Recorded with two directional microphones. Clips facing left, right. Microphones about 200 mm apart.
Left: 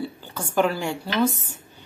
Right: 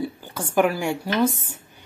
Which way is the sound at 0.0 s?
15° right (ahead or behind).